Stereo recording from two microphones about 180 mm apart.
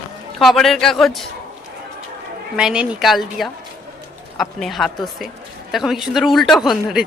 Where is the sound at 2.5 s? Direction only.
5° right (ahead or behind).